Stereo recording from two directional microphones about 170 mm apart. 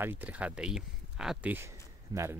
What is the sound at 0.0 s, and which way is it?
Speech, 10° right (ahead or behind).